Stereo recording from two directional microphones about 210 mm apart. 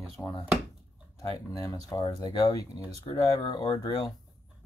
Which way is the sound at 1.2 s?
15° left (ahead or behind).